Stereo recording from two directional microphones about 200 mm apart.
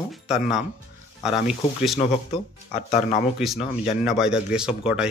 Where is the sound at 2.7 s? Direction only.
30° left (ahead or behind).